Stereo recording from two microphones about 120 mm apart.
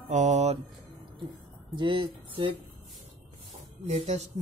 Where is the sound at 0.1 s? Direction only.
85° right.